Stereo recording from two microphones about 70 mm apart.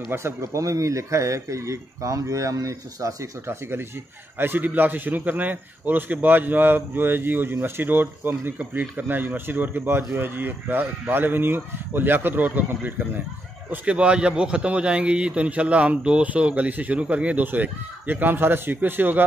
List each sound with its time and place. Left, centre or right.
0.1 s speech: right
4.4 s a man's voice: right
13.8 s a man's voice: centre